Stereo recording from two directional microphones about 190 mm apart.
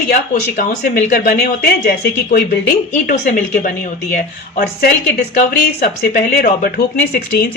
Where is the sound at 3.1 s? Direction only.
45° left (ahead or behind).